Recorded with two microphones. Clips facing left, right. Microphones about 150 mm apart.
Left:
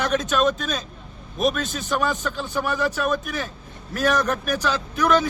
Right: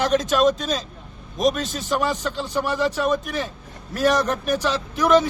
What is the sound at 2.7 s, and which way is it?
Speech, 25° right (ahead or behind).